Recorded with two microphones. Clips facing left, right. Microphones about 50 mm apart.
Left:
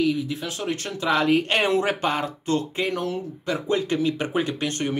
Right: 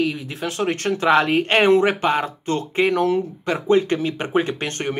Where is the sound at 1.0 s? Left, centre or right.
Right.